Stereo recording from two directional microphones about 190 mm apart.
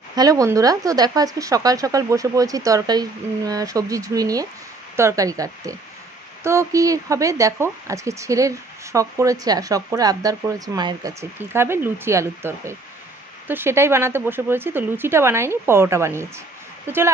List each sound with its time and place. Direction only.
0.1 s speech: 20° right (ahead or behind)